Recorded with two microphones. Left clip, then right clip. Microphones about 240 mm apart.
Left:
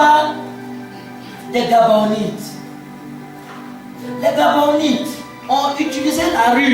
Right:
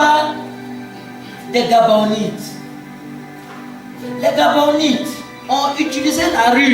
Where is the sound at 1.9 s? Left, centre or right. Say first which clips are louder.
Even; right.